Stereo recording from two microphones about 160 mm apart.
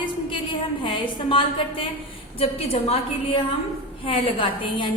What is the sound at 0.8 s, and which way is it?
A woman's voice, 30° left (ahead or behind).